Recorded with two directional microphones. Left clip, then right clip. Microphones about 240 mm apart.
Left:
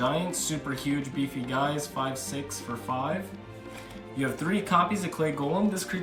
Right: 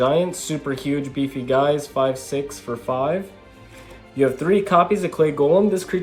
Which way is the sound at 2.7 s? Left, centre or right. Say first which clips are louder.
Right 7 dB; centre.